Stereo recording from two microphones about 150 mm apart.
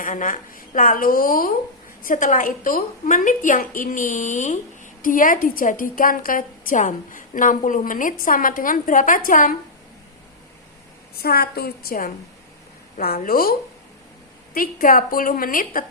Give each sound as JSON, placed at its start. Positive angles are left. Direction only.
{"t": 0.0, "sound": "a woman's voice", "side_deg": 60}
{"t": 11.1, "sound": "a woman's voice", "side_deg": 90}
{"t": 13.2, "sound": "a woman's voice", "side_deg": 75}